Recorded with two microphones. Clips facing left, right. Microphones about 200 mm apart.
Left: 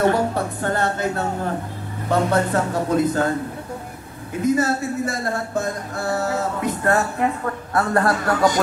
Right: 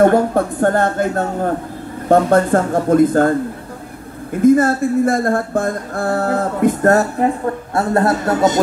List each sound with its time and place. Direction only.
0.0 s speech: 50° right (ahead or behind); by 8.5 s 25° right (ahead or behind)